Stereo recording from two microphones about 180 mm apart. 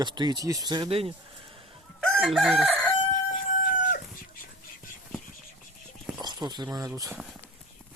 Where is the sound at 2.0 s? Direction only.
Centre (ahead or behind).